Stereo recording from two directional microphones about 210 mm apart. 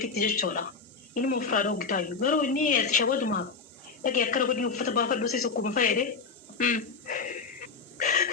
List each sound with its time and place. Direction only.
0.0 s speech: 40° left (ahead or behind)
7.9 s owl: 40° left (ahead or behind)